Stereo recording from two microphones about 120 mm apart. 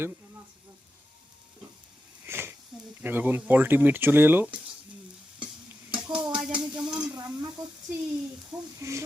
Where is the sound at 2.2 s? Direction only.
20° right (ahead or behind).